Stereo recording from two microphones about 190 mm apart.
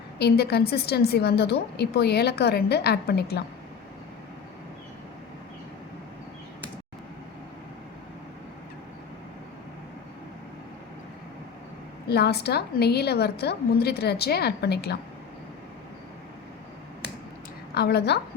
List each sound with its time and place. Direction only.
0.2 s a woman's voice: 60° left (ahead or behind)
12.0 s a woman's voice: 60° left (ahead or behind)
17.7 s a woman's voice: 60° left (ahead or behind)